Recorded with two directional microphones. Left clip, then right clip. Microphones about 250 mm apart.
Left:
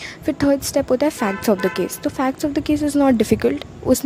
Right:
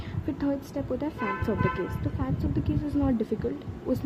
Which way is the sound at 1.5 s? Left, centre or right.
Left.